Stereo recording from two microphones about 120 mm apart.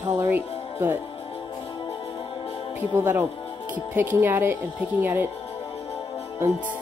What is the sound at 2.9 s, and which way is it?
Speech, 20° right (ahead or behind).